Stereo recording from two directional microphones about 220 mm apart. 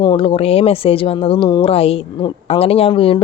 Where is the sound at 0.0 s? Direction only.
20° left (ahead or behind).